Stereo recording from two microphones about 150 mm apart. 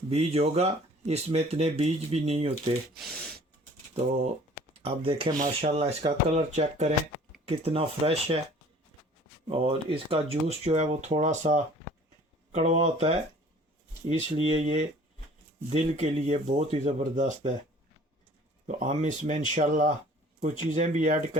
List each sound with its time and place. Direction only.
0.1 s speech: 45° right (ahead or behind)
2.9 s speech: centre (ahead or behind)
4.8 s speech: 40° right (ahead or behind)
9.5 s speech: 40° right (ahead or behind)
18.7 s speech: 50° right (ahead or behind)